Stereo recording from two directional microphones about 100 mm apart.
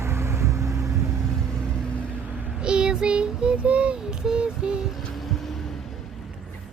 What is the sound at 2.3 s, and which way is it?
Child singing, 15° right (ahead or behind).